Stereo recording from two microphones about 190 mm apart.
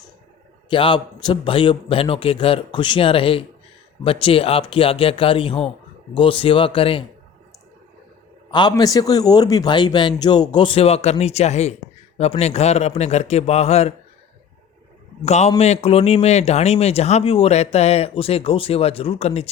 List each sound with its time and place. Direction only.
0.7 s a man's voice: 25° left (ahead or behind)
8.4 s a man's voice: 25° left (ahead or behind)
15.2 s speech: 35° left (ahead or behind)